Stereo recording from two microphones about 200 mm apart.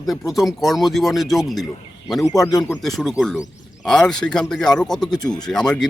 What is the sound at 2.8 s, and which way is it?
Speech, centre (ahead or behind).